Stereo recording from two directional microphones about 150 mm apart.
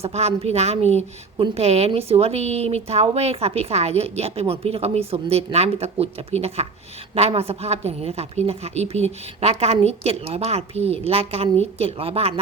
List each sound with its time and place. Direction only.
0.0 s a woman's voice: 45° right (ahead or behind)